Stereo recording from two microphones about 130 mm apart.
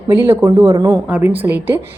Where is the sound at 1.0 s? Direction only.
15° right (ahead or behind).